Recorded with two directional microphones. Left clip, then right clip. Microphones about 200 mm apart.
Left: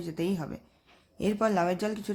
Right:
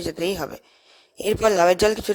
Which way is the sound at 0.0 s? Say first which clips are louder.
Right 8 dB; 45° right (ahead or behind).